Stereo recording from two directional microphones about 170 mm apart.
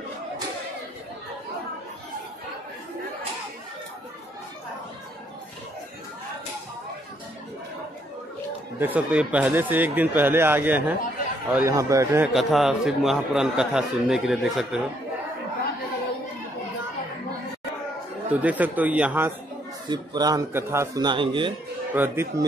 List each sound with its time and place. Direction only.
8.7 s speech: 10° right (ahead or behind)
12.3 s a man's voice: centre (ahead or behind)
18.3 s speech: 10° right (ahead or behind)
19.9 s a man's voice: 25° right (ahead or behind)
21.9 s speech: 15° right (ahead or behind)